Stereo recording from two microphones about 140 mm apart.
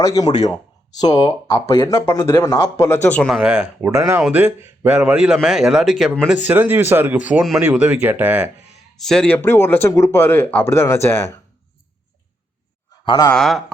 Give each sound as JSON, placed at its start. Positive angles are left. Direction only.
{"t": 0.0, "sound": "speech", "side_deg": 25}
{"t": 1.8, "sound": "speech", "side_deg": 20}
{"t": 3.2, "sound": "a man's voice", "side_deg": 0}
{"t": 9.0, "sound": "speech", "side_deg": 5}
{"t": 13.1, "sound": "a man's voice", "side_deg": 30}
{"t": 13.3, "sound": "a man's voice", "side_deg": 5}